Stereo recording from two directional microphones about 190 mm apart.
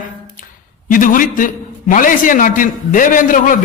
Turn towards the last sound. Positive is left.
turn(degrees=45)  # may be behind; listen again after turning